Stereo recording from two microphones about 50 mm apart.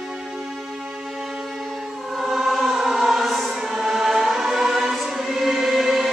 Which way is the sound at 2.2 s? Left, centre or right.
Centre.